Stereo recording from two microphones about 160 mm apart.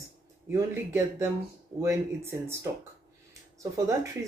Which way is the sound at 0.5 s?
20° right (ahead or behind).